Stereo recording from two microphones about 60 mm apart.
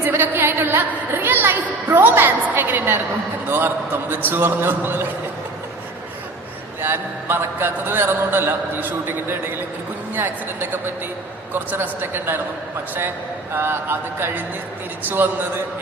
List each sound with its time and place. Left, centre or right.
0.0 s a woman's voice: right
6.8 s a woman's voice: right
13.5 s a woman's voice: right